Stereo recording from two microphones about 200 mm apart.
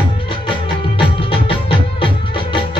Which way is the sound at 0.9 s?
25° left (ahead or behind).